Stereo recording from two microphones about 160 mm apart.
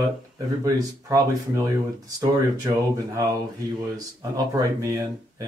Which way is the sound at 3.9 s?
20° right (ahead or behind).